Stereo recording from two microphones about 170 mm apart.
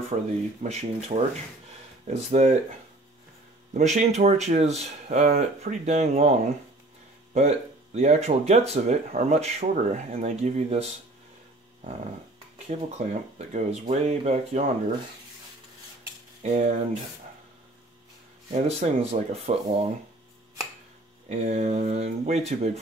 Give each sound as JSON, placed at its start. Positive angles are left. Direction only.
{"t": 0.1, "sound": "speech", "side_deg": -40}
{"t": 3.7, "sound": "speech", "side_deg": -40}
{"t": 7.3, "sound": "speech", "side_deg": -40}
{"t": 12.6, "sound": "speech", "side_deg": -40}
{"t": 16.4, "sound": "speech", "side_deg": -40}
{"t": 18.5, "sound": "speech", "side_deg": -40}
{"t": 21.3, "sound": "speech", "side_deg": -40}